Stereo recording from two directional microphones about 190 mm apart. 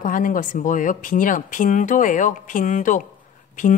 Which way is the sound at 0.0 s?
45° left (ahead or behind).